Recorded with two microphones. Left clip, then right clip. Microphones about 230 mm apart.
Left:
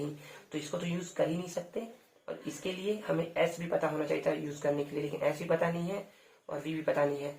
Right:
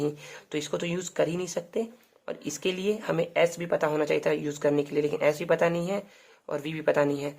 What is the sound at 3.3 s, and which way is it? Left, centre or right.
Speech, right.